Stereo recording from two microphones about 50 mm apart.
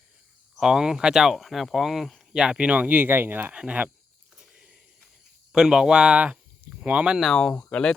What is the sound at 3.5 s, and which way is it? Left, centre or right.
Speech, right.